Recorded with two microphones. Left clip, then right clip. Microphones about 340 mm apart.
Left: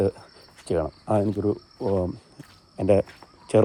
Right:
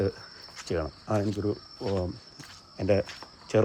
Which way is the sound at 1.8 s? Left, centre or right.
Left.